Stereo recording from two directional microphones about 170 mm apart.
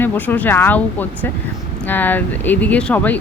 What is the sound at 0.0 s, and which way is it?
Speech, 10° left (ahead or behind).